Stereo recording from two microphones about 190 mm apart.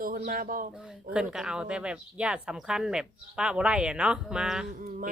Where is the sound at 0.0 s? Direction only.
50° right (ahead or behind).